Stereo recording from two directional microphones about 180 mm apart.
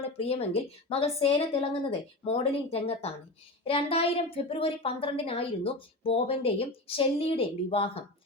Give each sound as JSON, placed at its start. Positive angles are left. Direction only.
{"t": 0.2, "sound": "a woman's voice", "side_deg": 35}